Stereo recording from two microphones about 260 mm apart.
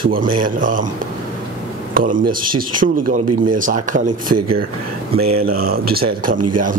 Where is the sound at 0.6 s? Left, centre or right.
Right.